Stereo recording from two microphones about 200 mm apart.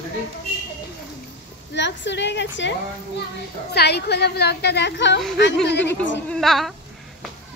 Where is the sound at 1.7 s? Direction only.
60° left (ahead or behind).